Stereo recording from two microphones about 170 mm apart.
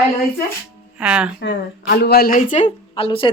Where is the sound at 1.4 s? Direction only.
70° left (ahead or behind); by 2.7 s 50° left (ahead or behind).